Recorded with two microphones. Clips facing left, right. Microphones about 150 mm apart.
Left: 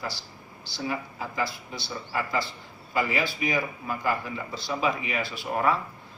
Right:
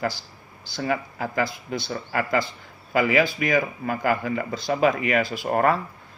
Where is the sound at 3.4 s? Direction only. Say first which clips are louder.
Right 5 dB; 60° right (ahead or behind); by 5.2 s 85° right.